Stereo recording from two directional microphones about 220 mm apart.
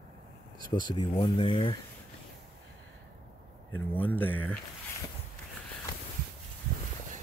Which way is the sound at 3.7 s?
10° left (ahead or behind).